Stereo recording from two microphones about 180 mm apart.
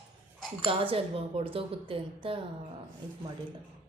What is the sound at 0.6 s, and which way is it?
Speech, 30° right (ahead or behind).